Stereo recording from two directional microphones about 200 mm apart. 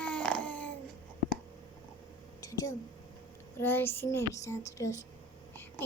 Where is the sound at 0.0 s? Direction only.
5° left (ahead or behind).